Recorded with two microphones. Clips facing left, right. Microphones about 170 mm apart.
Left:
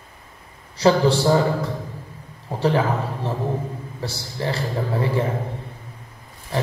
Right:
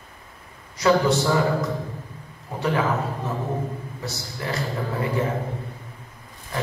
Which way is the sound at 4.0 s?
30° left (ahead or behind).